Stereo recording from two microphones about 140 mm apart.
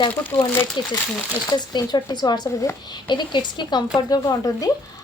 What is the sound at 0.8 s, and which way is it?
A woman's voice, 35° left (ahead or behind).